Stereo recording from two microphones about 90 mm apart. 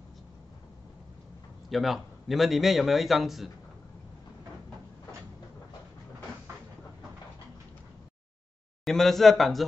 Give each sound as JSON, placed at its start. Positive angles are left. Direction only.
{"t": 1.7, "sound": "a man's voice", "side_deg": 0}
{"t": 8.8, "sound": "a man's voice", "side_deg": 5}